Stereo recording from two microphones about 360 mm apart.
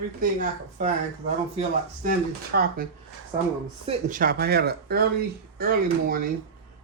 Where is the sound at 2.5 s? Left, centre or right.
Right.